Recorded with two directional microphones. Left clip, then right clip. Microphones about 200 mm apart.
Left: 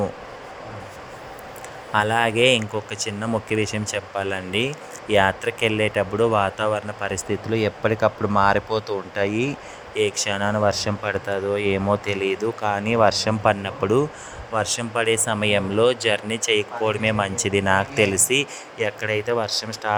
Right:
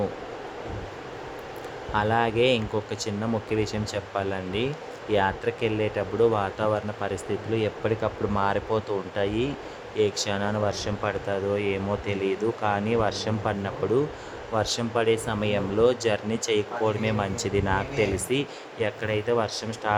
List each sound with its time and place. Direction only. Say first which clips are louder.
1.9 s speech: left 4 dB; 15° left (ahead or behind)